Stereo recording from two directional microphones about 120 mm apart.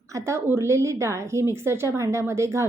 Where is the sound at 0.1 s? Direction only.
25° right (ahead or behind).